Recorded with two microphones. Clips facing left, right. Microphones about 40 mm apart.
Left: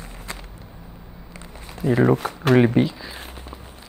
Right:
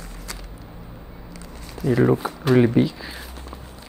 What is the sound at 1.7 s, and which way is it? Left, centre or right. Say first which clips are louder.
Speech: even; left.